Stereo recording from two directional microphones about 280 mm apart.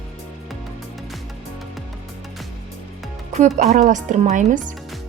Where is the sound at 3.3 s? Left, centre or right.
Right.